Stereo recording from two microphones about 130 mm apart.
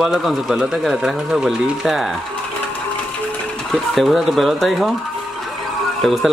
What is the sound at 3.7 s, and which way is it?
Speech, centre (ahead or behind).